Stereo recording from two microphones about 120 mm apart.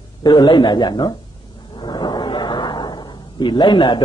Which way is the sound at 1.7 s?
40° left (ahead or behind).